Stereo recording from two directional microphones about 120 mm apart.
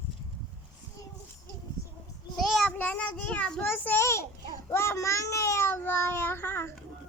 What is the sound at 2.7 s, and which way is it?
A child's voice, 10° left (ahead or behind).